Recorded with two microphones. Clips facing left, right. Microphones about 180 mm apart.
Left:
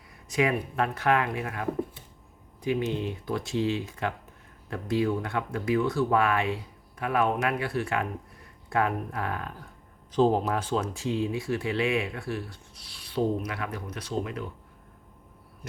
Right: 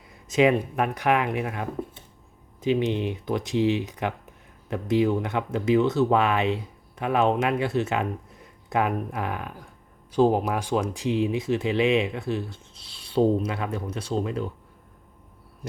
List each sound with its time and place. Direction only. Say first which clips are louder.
0.3 s speech: right 6 dB; 20° right (ahead or behind)